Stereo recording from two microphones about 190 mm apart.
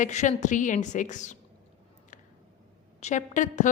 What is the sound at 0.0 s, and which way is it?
A woman's voice, 40° left (ahead or behind).